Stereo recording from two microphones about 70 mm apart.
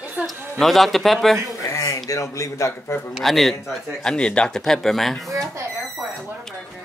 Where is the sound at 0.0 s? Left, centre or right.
Centre.